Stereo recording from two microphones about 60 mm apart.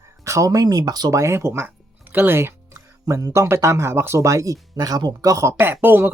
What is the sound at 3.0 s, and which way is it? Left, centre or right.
Speech, right.